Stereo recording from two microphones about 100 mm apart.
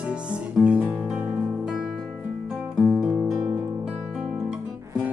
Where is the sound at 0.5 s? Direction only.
15° right (ahead or behind).